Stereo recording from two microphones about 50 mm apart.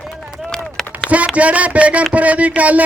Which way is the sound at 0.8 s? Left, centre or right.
Centre.